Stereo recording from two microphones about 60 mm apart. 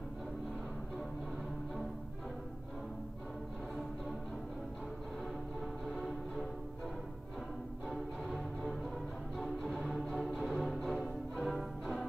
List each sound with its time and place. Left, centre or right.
5.9 s music: centre
7.9 s music: centre